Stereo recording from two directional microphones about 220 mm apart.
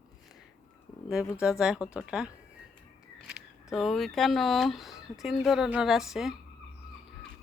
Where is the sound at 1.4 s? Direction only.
5° right (ahead or behind).